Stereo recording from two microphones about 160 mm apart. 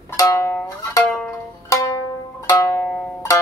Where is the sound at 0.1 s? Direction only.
20° left (ahead or behind).